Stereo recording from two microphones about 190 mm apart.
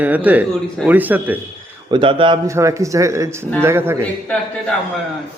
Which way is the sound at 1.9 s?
25° right (ahead or behind).